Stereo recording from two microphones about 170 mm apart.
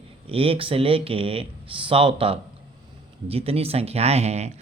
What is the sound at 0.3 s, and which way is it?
Speech, 35° right (ahead or behind).